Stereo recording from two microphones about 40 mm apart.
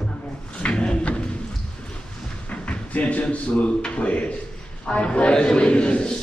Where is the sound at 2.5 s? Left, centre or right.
Left.